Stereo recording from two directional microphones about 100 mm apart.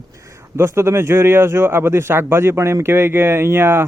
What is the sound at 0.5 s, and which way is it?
Speech, 25° right (ahead or behind).